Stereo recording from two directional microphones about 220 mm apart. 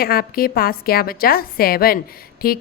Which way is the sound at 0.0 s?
45° left (ahead or behind).